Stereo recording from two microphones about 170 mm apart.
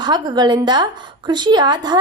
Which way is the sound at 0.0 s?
25° right (ahead or behind).